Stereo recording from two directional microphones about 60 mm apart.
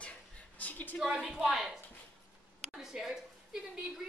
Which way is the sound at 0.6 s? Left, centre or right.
Left.